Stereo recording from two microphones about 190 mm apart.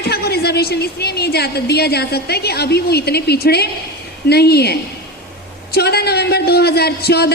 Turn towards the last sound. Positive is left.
turn(degrees=55)  # may be behind; listen again after turning